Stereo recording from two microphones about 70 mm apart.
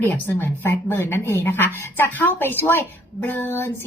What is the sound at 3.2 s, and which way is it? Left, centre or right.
Female singing, left.